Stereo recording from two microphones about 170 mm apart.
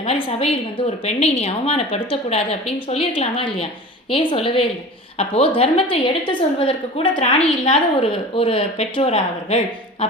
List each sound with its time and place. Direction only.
0.0 s a woman's voice: 35° left (ahead or behind)